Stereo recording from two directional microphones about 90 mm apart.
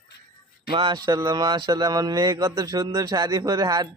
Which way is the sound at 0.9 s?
45° right (ahead or behind).